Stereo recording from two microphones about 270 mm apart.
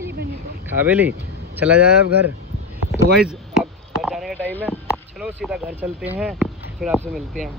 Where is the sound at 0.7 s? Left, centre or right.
Centre.